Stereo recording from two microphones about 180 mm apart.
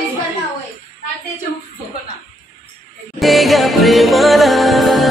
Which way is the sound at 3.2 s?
Centre (ahead or behind).